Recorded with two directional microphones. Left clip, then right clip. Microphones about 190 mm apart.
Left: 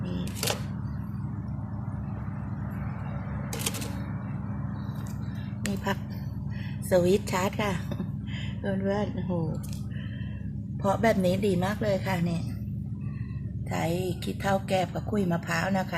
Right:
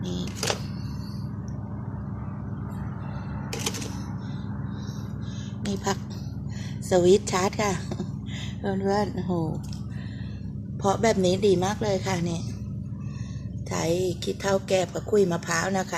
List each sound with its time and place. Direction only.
6.9 s a woman's voice: 20° right (ahead or behind)
10.8 s a woman's voice: 25° right (ahead or behind)
13.7 s a woman's voice: 30° right (ahead or behind)